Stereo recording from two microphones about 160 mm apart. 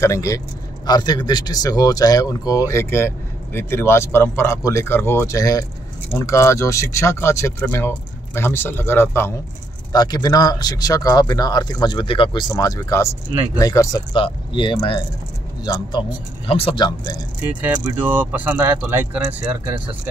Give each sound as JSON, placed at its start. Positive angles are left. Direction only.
{"t": 0.0, "sound": "speech", "side_deg": 20}
{"t": 16.4, "sound": "speech", "side_deg": 35}
{"t": 17.6, "sound": "speech", "side_deg": -10}